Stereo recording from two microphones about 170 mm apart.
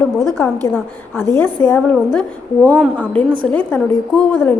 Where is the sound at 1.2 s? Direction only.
15° left (ahead or behind).